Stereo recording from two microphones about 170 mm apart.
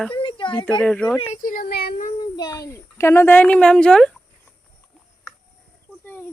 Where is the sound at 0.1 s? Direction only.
30° left (ahead or behind).